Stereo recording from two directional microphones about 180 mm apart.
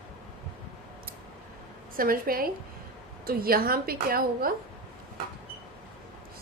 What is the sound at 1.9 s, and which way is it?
A woman's voice, 55° right (ahead or behind).